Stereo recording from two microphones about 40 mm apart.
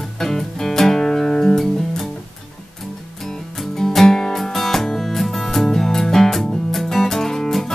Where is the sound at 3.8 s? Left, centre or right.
Centre.